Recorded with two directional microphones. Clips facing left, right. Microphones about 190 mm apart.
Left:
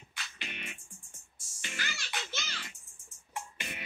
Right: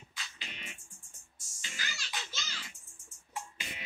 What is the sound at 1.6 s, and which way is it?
Music, 60° left (ahead or behind).